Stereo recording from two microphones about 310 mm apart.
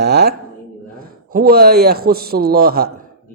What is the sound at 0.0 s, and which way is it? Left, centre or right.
A man's voice, right.